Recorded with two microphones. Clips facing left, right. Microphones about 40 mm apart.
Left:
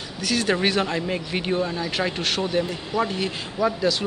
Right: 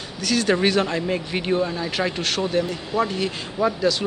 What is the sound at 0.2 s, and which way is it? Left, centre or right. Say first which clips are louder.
A man's voice: right 2 dB; centre.